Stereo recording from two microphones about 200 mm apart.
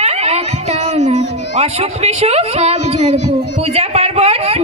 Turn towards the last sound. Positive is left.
turn(degrees=-30)  # may be behind; listen again after turning